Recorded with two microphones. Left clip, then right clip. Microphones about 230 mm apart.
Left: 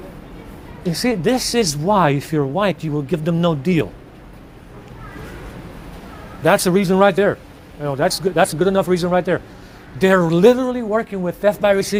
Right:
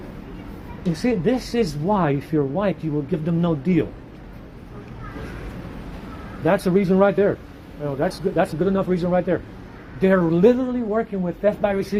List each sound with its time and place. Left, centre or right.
1.0 s speech: left
6.4 s speech: left